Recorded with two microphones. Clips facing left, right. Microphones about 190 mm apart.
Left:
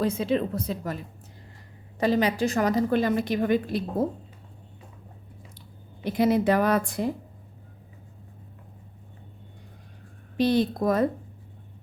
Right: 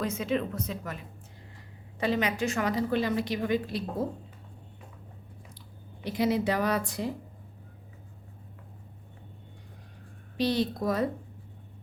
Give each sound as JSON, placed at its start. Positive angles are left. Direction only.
{"t": 0.0, "sound": "speech", "side_deg": 30}
{"t": 2.0, "sound": "a woman's voice", "side_deg": 35}
{"t": 6.1, "sound": "a woman's voice", "side_deg": 50}
{"t": 10.3, "sound": "a woman's voice", "side_deg": 50}